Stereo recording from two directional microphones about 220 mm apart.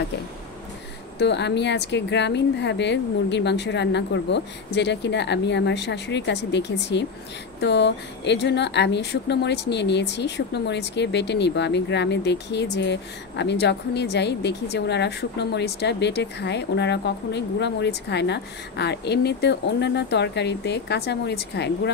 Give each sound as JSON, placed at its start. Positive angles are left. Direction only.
{"t": 1.1, "sound": "speech", "side_deg": 50}